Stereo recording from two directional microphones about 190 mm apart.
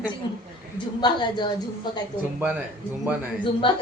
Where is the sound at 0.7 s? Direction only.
25° left (ahead or behind).